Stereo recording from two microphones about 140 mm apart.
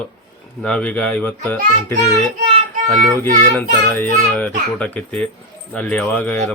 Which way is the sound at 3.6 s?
10° left (ahead or behind).